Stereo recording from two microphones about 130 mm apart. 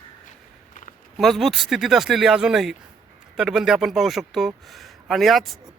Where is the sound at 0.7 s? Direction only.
85° left.